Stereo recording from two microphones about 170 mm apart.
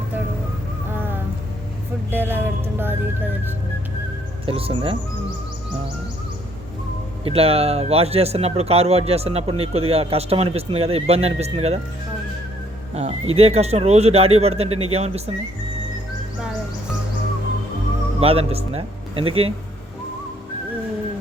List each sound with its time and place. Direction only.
0.9 s music: 10° right (ahead or behind)
4.4 s speech: 35° right (ahead or behind)
7.3 s speech: 35° right (ahead or behind)
12.9 s speech: 40° right (ahead or behind)
18.2 s speech: 35° right (ahead or behind)